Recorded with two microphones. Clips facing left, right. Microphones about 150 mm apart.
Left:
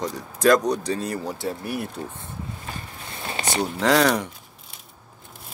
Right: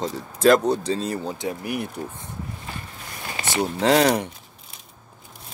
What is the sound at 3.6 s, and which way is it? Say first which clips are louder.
Speech: right 2 dB; 25° right (ahead or behind).